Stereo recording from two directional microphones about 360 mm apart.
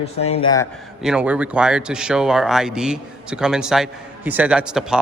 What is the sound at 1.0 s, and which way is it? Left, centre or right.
Speech, centre.